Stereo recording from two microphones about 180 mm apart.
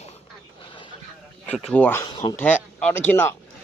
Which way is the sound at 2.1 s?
20° left (ahead or behind).